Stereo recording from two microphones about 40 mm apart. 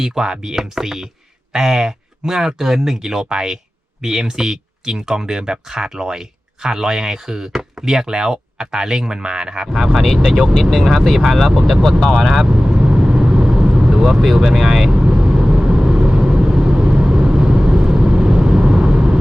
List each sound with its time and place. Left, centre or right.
0.0 s speech: centre
10.5 s speech: centre
11.8 s speech: centre
12.0 s speech: centre
12.5 s speech: right
12.7 s vehicle: centre
13.9 s speech: centre
14.9 s vehicle: right